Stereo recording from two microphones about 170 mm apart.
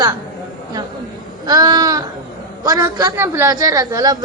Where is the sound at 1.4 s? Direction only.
20° right (ahead or behind).